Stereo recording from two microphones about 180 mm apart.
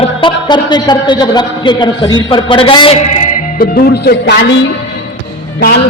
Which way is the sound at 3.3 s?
55° left (ahead or behind).